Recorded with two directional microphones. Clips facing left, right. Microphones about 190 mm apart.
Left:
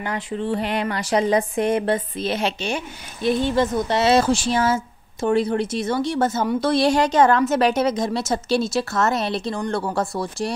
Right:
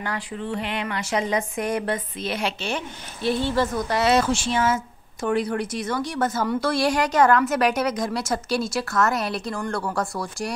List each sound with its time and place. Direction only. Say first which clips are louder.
0.0 s speech: left 4 dB; 25° left (ahead or behind)